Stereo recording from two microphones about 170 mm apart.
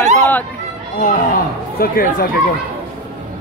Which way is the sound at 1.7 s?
60° left (ahead or behind).